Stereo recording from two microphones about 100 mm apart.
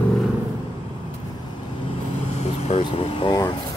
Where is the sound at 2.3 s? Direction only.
90° left.